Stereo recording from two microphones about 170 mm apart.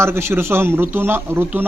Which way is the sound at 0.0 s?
15° right (ahead or behind).